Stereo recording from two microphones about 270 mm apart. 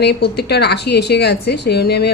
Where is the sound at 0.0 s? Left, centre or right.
Left.